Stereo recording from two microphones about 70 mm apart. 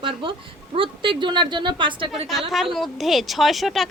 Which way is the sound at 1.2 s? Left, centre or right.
Right.